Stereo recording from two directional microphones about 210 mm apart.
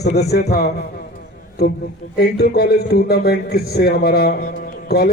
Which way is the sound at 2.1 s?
50° left (ahead or behind).